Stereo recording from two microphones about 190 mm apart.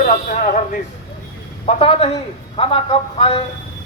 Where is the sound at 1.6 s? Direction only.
30° left (ahead or behind).